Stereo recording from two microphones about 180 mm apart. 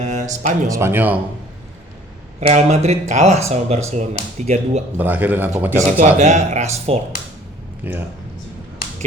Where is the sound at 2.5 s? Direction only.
40° right (ahead or behind).